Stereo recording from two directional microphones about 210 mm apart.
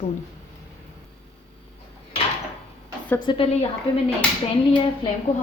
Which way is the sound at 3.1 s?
25° left (ahead or behind).